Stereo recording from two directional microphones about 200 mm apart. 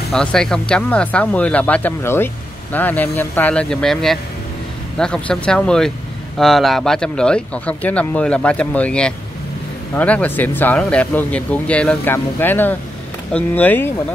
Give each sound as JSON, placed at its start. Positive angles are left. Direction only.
{"t": 0.1, "sound": "speech", "side_deg": 5}